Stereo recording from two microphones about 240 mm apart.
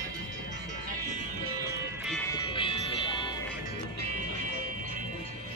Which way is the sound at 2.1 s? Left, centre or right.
Centre.